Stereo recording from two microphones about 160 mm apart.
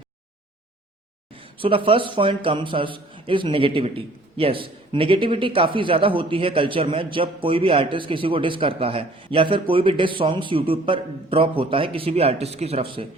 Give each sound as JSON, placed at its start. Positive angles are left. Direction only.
{"t": 1.3, "sound": "a man's voice", "side_deg": -35}